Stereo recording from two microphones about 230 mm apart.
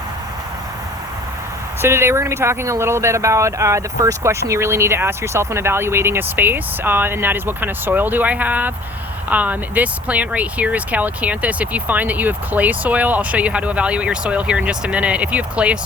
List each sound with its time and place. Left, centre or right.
1.8 s speech: centre